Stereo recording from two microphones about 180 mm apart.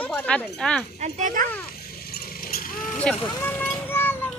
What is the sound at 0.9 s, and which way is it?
Speech, 40° right (ahead or behind).